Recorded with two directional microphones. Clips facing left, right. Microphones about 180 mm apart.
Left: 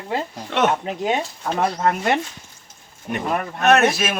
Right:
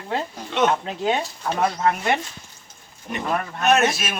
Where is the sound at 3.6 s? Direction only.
60° left (ahead or behind).